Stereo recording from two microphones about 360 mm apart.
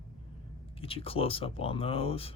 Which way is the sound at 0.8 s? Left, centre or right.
Centre.